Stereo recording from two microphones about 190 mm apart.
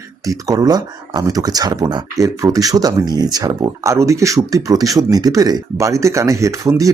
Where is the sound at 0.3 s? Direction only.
20° right (ahead or behind).